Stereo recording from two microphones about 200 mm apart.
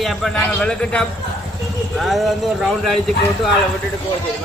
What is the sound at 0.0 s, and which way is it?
A man's voice, centre (ahead or behind).